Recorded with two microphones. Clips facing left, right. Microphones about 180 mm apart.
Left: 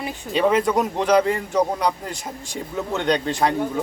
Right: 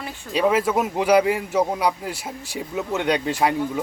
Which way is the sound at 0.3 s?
5° right (ahead or behind).